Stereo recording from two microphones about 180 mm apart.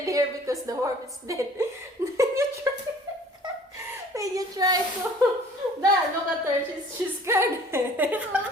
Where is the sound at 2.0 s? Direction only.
15° right (ahead or behind).